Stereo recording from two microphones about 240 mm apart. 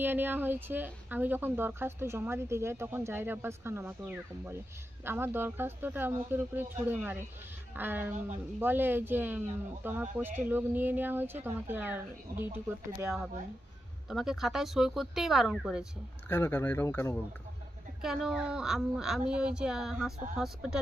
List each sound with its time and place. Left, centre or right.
0.0 s a woman's voice: centre
16.3 s speech: centre
18.0 s a woman's voice: centre